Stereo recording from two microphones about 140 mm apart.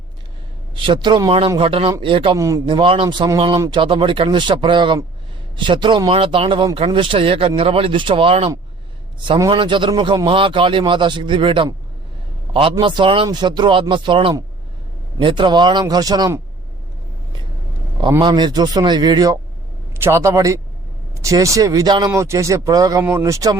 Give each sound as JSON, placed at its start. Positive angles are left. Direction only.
{"t": 0.8, "sound": "a man's voice", "side_deg": -35}
{"t": 2.3, "sound": "speech", "side_deg": -20}
{"t": 2.6, "sound": "a man's voice", "side_deg": -35}
{"t": 12.8, "sound": "a man's voice", "side_deg": -35}
{"t": 18.2, "sound": "a man's voice", "side_deg": -30}